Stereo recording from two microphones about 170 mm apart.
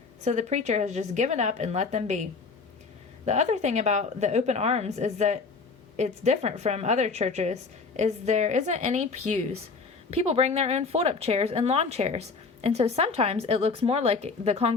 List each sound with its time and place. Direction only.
0.3 s a woman's voice: 45° right (ahead or behind)
3.2 s a woman's voice: 40° right (ahead or behind)